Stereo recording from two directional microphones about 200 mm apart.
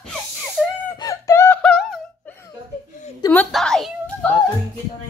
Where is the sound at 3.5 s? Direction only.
Centre (ahead or behind).